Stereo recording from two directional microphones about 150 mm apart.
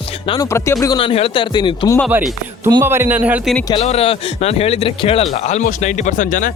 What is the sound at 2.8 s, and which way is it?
Speech, 15° right (ahead or behind).